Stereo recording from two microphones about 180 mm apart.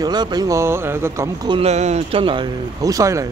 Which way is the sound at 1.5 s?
35° right (ahead or behind).